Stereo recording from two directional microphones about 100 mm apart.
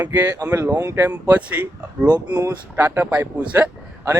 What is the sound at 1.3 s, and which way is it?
Speech, 15° right (ahead or behind).